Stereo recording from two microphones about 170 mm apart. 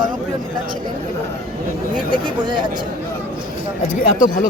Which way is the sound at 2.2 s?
30° right (ahead or behind).